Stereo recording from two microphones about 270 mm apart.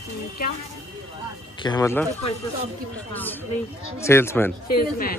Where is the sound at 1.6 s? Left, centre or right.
Centre.